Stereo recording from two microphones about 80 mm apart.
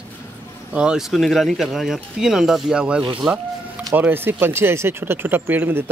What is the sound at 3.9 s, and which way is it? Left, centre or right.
Speech, right.